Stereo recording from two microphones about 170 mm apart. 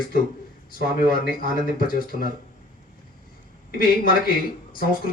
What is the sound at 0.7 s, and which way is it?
Speech, 60° left (ahead or behind).